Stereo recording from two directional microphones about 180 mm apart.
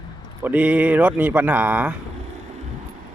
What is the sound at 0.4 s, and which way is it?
Speech, 10° right (ahead or behind).